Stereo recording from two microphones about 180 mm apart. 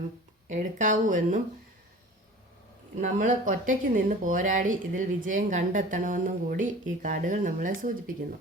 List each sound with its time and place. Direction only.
0.4 s speech: 45° right (ahead or behind)
2.9 s speech: 45° right (ahead or behind)